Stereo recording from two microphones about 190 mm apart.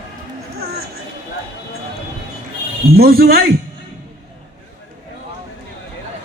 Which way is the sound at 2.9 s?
55° right (ahead or behind).